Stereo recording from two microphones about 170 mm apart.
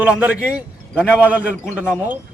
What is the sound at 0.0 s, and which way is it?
A man's voice, 5° right (ahead or behind).